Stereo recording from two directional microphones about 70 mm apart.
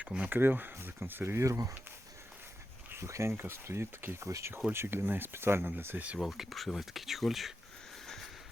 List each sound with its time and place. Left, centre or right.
0.3 s speech: right
2.9 s speech: right
6.1 s speech: centre
8.0 s train: centre